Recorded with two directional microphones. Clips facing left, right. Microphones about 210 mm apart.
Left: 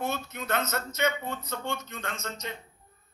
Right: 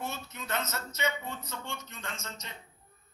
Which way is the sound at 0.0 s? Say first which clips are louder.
Left 6 dB; 60° left (ahead or behind).